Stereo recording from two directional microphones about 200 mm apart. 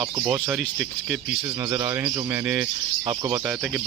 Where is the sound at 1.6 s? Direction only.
20° right (ahead or behind).